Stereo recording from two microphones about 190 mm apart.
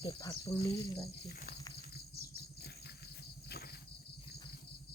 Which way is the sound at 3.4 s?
55° left (ahead or behind).